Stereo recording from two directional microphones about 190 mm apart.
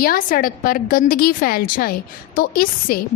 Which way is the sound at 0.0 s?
45° left (ahead or behind).